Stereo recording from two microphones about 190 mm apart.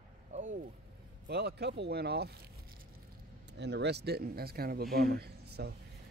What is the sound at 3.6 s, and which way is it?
Speech, 65° right (ahead or behind).